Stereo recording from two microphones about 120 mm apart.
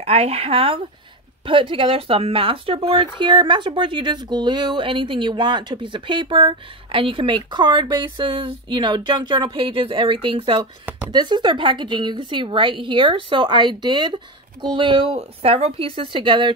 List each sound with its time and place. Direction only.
0.0 s speech: 55° right (ahead or behind)